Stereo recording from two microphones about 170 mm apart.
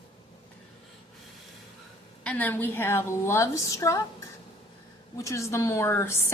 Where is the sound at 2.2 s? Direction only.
10° left (ahead or behind).